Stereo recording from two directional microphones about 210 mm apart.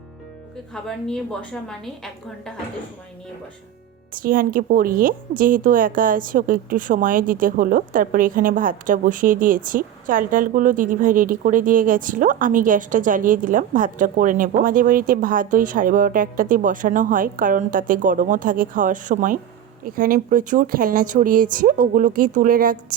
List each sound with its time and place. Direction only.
0.7 s a woman's voice: centre (ahead or behind)
4.1 s a woman's voice: 40° right (ahead or behind)